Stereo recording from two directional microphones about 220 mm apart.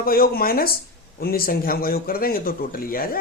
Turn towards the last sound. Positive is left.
turn(degrees=40)  # may be behind; listen again after turning